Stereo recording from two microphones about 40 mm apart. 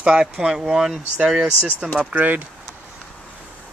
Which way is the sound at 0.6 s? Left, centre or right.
Centre.